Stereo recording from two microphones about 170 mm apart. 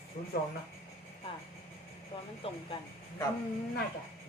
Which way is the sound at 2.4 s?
35° left (ahead or behind).